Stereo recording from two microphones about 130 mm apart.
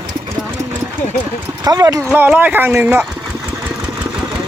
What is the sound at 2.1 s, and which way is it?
Speech, 15° right (ahead or behind).